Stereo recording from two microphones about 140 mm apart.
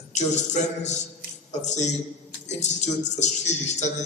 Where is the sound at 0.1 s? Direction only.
55° left (ahead or behind).